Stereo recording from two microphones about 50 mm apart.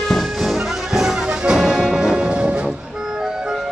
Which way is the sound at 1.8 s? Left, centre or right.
Centre.